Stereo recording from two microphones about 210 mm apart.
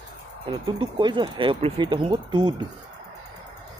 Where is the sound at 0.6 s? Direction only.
20° right (ahead or behind).